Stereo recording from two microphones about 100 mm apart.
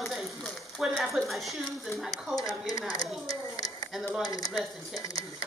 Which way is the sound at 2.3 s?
35° left (ahead or behind).